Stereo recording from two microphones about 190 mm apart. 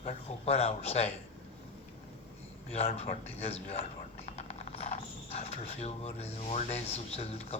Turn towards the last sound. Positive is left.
turn(degrees=35)  # may be behind; listen again after turning